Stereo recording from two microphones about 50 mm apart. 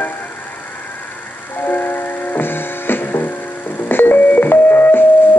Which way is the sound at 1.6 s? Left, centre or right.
Left.